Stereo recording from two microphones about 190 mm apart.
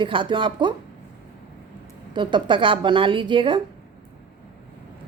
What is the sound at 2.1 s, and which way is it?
A woman's voice, 25° right (ahead or behind).